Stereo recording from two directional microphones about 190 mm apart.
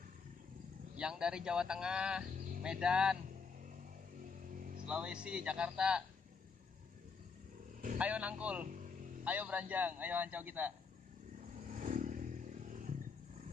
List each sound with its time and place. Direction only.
0.9 s speech: 5° right (ahead or behind)
2.2 s a sound: 45° right (ahead or behind)
2.6 s speech: 5° right (ahead or behind)
4.2 s music: 45° right (ahead or behind)
4.8 s speech: 5° right (ahead or behind)
8.0 s a man's voice: 5° right (ahead or behind)
11.4 s vehicle: 40° right (ahead or behind)